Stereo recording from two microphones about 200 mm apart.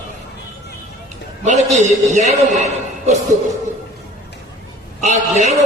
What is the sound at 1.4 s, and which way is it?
Speech, 35° right (ahead or behind).